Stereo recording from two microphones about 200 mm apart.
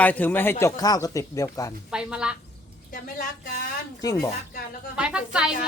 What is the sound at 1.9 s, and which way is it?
Speech, 5° right (ahead or behind).